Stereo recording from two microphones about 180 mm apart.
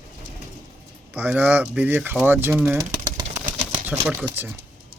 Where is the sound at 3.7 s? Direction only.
10° right (ahead or behind).